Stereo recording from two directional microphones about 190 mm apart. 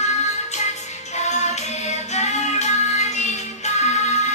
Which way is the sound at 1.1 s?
35° left (ahead or behind).